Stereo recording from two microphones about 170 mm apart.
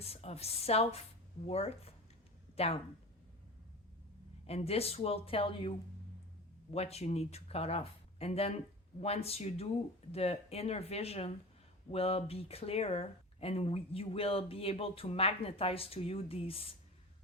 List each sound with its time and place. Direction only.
0.0 s speech: 35° left (ahead or behind)
4.4 s speech: 35° left (ahead or behind)
6.7 s speech: 40° left (ahead or behind)